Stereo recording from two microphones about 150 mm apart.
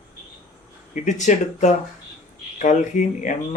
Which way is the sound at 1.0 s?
55° left (ahead or behind).